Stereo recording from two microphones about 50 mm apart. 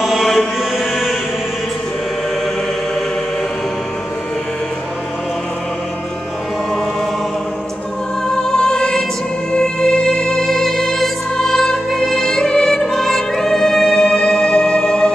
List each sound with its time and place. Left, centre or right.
0.0 s chant: centre
8.5 s music: centre